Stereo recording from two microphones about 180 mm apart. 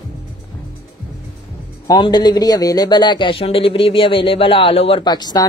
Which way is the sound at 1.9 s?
20° left (ahead or behind).